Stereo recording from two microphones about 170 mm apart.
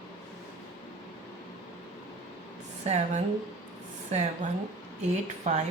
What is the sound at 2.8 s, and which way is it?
A woman's voice, 40° right (ahead or behind).